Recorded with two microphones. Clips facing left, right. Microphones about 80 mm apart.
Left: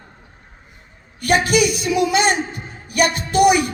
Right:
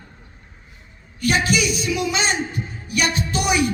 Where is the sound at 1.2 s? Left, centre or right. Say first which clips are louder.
Left 4 dB; left.